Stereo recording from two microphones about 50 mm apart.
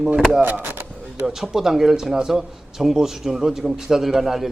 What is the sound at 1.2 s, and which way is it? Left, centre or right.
A man's voice, centre.